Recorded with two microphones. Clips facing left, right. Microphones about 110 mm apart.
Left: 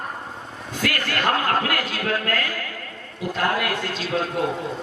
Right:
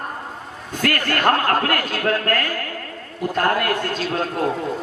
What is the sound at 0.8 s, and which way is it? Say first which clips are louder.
A woman's voice: right 4 dB; 50° right (ahead or behind).